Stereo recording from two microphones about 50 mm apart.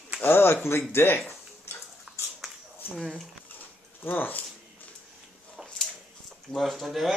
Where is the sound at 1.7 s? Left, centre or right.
Left.